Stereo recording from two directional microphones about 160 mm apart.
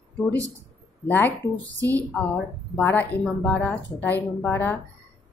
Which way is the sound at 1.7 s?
20° right (ahead or behind).